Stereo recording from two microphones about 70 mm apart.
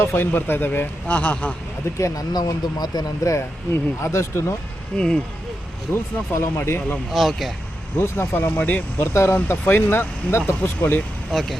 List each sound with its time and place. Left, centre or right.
0.0 s speech: left
2.0 s speech: left
2.3 s speech: left
3.3 s speech: left
4.9 s speech: centre
5.9 s speech: left
7.1 s speech: centre
7.9 s speech: left
9.1 s speech: left
11.3 s speech: centre